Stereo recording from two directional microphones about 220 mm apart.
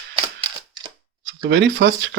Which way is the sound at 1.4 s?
55° right (ahead or behind).